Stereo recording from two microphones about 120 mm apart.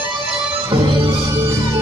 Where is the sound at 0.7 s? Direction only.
45° right (ahead or behind).